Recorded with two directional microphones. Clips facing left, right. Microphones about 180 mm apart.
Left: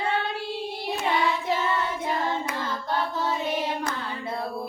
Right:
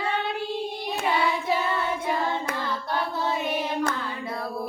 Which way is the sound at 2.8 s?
15° right (ahead or behind).